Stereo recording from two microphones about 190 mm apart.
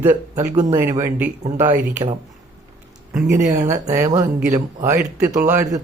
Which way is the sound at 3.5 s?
15° right (ahead or behind).